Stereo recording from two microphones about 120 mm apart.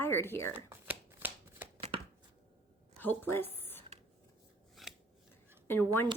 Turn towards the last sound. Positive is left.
turn(degrees=20)  # may be behind; listen again after turning